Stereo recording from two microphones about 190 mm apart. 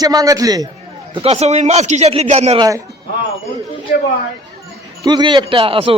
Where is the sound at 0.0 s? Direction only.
20° right (ahead or behind).